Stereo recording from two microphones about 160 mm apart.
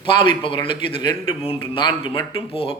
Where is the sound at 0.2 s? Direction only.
30° left (ahead or behind).